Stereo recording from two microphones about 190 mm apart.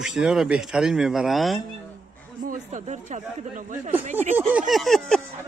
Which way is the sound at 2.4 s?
40° right (ahead or behind).